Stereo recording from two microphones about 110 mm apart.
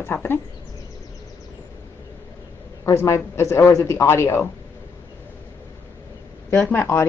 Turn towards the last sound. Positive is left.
turn(degrees=20)  # may be behind; listen again after turning